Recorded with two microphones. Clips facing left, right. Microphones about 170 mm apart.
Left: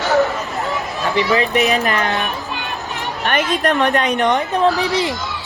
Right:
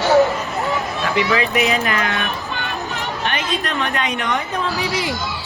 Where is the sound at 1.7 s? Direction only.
40° left (ahead or behind).